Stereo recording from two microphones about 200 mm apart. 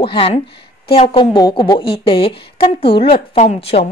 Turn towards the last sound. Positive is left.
turn(degrees=30)  # may be behind; listen again after turning